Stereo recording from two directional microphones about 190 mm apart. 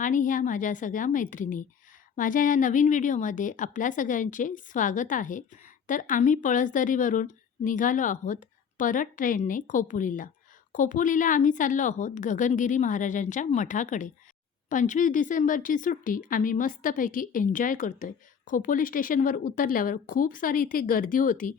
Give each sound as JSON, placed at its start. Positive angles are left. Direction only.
{"t": 0.0, "sound": "a woman's voice", "side_deg": 45}